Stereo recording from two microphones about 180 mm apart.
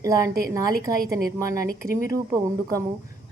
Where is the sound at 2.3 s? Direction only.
20° right (ahead or behind).